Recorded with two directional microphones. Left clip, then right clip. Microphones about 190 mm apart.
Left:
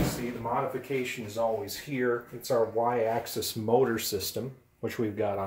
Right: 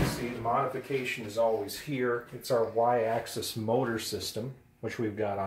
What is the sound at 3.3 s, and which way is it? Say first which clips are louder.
Speech: left 4 dB; 40° left (ahead or behind).